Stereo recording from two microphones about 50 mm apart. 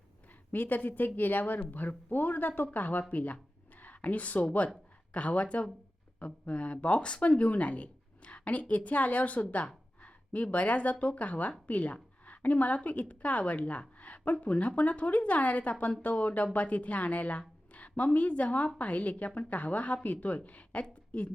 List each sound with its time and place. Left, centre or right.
0.5 s a woman's voice: left
20.8 s speech: left